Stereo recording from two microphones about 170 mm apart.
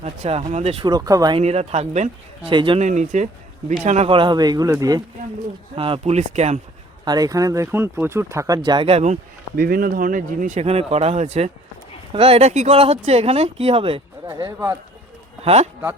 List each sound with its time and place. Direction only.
0.0 s speech: 40° right (ahead or behind)
0.9 s speech: 20° right (ahead or behind)
1.4 s speech: 40° right (ahead or behind)
2.5 s speech: 30° right (ahead or behind)
2.8 s speech: 45° right (ahead or behind); by 5.0 s 20° right (ahead or behind)
5.7 s speech: 35° right (ahead or behind)
7.0 s speech: 25° right (ahead or behind)
9.6 s speech: 60° right (ahead or behind); by 14.0 s 35° right (ahead or behind)
14.3 s speech: 20° right (ahead or behind)
15.4 s speech: 40° right (ahead or behind)